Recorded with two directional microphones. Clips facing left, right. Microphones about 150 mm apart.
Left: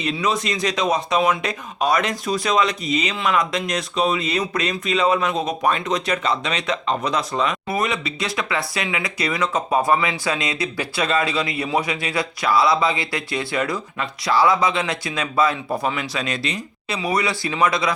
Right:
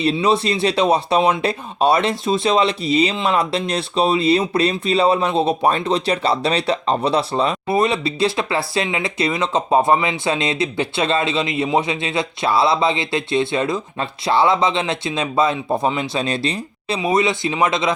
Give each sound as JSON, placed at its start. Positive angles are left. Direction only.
{"t": 0.0, "sound": "speech", "side_deg": -30}